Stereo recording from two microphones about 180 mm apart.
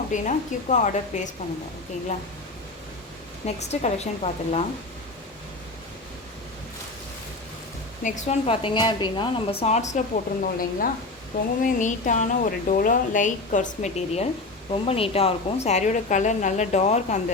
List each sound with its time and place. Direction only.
0.1 s a woman's voice: 45° left (ahead or behind)
3.4 s a woman's voice: 35° left (ahead or behind)
8.0 s a woman's voice: 40° left (ahead or behind)
10.4 s a woman's voice: 50° left (ahead or behind)